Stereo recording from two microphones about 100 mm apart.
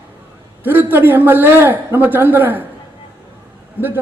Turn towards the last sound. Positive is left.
turn(degrees=-20)  # may be behind; listen again after turning